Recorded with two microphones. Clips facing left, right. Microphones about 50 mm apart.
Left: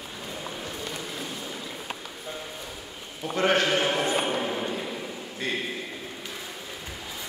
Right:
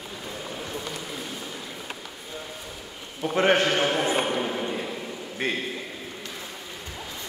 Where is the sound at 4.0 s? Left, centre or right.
Centre.